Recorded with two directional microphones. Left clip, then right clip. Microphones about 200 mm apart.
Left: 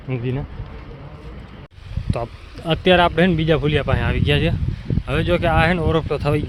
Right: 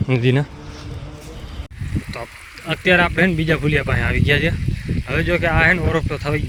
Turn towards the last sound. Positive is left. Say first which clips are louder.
# left 2 dB
turn(degrees=10)  # may be behind; listen again after turning